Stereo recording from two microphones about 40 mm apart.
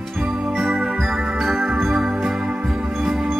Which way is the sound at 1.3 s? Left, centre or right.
Centre.